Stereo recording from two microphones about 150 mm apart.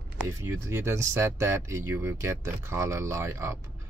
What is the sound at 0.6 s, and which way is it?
Speech, 15° right (ahead or behind).